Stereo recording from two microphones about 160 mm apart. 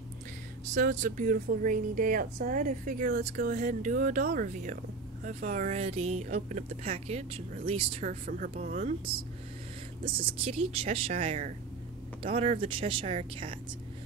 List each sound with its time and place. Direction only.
0.7 s speech: 55° right (ahead or behind); by 8.0 s 35° right (ahead or behind)
8.0 s speech: 55° right (ahead or behind); by 13.6 s 35° right (ahead or behind)